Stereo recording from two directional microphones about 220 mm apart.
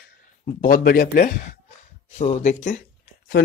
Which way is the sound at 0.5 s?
40° left (ahead or behind).